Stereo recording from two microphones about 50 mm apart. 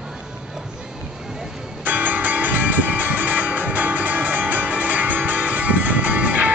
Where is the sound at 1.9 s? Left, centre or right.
Right.